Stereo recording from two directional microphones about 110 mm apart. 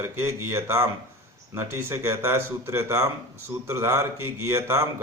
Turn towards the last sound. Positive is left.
turn(degrees=-25)  # may be behind; listen again after turning